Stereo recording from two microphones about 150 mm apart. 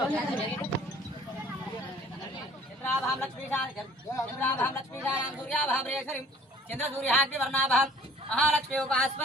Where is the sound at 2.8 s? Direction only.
10° left (ahead or behind).